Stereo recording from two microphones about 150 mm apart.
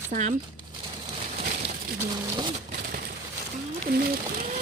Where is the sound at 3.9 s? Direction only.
85° right.